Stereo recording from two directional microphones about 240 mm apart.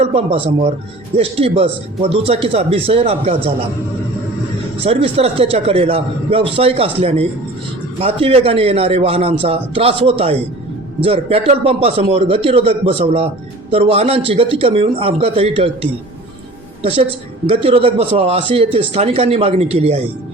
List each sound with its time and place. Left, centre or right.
0.0 s a man's voice: right
4.8 s a man's voice: right